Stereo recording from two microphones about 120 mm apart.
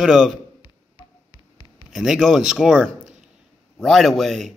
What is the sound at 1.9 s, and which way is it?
Speech, 5° right (ahead or behind).